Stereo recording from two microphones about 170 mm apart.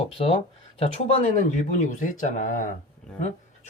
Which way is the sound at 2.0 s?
50° left (ahead or behind).